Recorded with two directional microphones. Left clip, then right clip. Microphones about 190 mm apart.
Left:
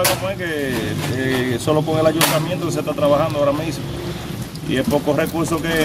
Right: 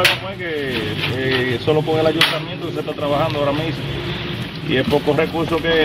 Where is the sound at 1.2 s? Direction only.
15° left (ahead or behind).